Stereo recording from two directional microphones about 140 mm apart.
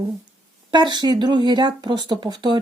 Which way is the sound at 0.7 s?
30° right (ahead or behind).